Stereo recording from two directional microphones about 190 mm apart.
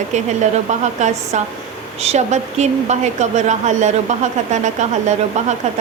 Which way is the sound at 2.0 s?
35° right (ahead or behind).